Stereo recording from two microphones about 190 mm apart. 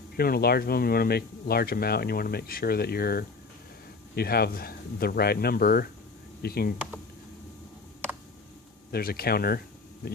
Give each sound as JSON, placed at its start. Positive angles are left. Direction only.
{"t": 0.2, "sound": "speech", "side_deg": 55}
{"t": 8.9, "sound": "speech", "side_deg": 50}